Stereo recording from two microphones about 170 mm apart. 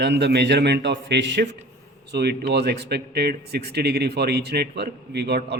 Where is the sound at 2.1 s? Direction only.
75° right (ahead or behind).